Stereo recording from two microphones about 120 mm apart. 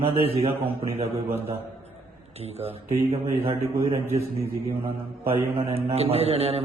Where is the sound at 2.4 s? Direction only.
60° right (ahead or behind).